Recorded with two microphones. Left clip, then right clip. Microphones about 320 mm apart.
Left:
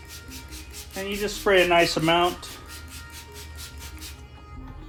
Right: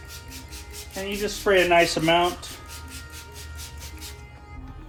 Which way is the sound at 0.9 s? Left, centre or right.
Centre.